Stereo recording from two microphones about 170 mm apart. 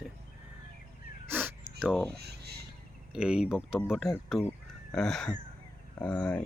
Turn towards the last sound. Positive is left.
turn(degrees=5)  # may be behind; listen again after turning